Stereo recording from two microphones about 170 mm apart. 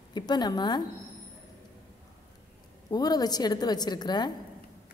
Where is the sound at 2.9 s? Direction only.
25° left (ahead or behind).